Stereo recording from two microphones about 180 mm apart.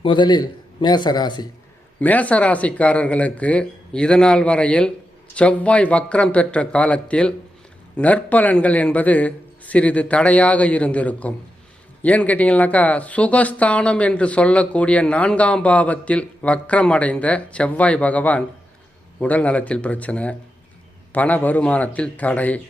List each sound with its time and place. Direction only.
0.0 s a man's voice: 25° left (ahead or behind)
2.0 s speech: 10° left (ahead or behind)